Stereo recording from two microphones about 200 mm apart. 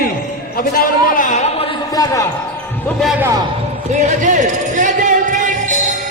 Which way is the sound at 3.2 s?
20° right (ahead or behind).